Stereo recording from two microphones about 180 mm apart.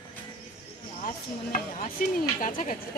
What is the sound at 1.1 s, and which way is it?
Stir, 50° left (ahead or behind).